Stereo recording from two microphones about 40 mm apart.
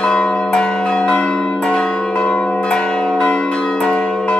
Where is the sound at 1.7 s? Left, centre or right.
Left.